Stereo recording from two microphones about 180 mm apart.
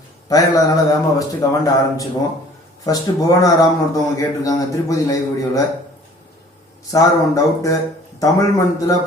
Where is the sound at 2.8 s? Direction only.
20° left (ahead or behind).